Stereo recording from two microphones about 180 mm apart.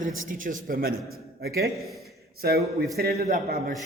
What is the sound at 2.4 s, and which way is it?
A man's voice, 60° right (ahead or behind).